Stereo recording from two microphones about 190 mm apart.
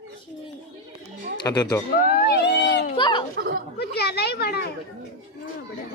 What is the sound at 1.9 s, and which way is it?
Speech, 50° left (ahead or behind).